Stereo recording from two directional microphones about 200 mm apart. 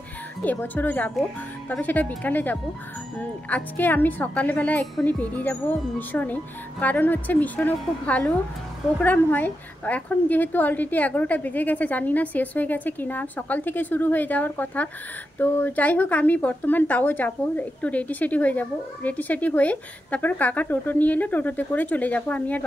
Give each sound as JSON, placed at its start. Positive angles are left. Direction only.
{"t": 0.4, "sound": "speech", "side_deg": 10}